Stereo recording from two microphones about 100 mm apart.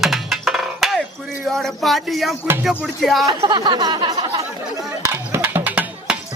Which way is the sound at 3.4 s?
50° right (ahead or behind).